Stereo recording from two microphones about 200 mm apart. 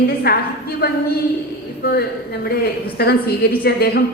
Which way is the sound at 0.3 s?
50° left (ahead or behind).